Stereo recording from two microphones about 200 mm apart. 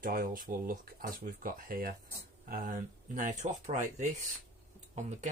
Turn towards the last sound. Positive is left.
turn(degrees=-35)  # may be behind; listen again after turning